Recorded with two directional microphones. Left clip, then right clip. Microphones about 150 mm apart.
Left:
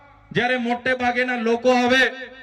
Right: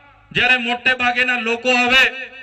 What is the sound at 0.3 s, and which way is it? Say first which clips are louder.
Speech: right 5 dB; 35° left (ahead or behind).